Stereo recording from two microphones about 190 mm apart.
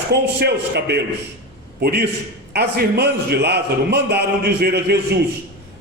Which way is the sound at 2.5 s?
60° right (ahead or behind).